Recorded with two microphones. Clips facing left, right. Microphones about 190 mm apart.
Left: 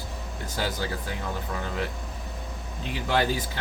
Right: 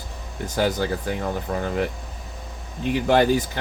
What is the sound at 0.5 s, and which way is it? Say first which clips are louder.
Speech: right 8 dB; 50° right (ahead or behind).